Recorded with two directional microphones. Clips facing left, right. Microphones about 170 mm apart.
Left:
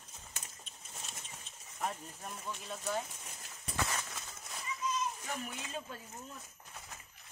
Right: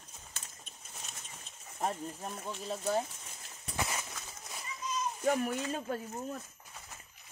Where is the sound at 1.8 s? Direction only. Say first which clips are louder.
Right 4 dB; 35° right (ahead or behind).